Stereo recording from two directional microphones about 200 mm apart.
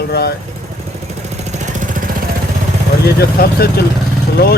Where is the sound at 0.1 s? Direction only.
55° left (ahead or behind).